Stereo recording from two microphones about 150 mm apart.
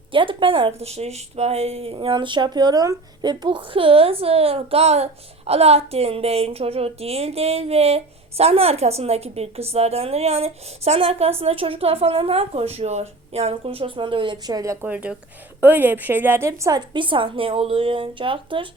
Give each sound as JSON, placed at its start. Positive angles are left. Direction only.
{"t": 0.1, "sound": "a woman's voice", "side_deg": -35}
{"t": 14.8, "sound": "speech", "side_deg": -10}